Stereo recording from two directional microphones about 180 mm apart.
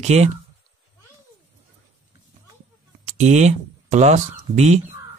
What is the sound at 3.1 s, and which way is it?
Speech, 40° right (ahead or behind).